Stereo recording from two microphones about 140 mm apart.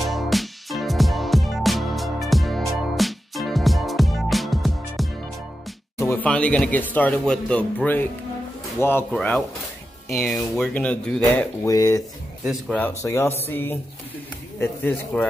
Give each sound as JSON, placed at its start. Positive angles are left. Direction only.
{"t": 0.0, "sound": "music", "side_deg": 0}
{"t": 5.9, "sound": "music", "side_deg": 20}
{"t": 6.2, "sound": "speech", "side_deg": 10}
{"t": 11.6, "sound": "speech", "side_deg": 25}